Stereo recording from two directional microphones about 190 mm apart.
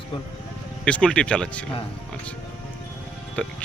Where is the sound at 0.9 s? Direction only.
5° left (ahead or behind).